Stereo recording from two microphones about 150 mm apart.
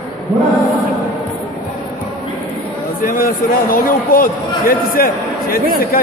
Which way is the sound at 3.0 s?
70° left (ahead or behind).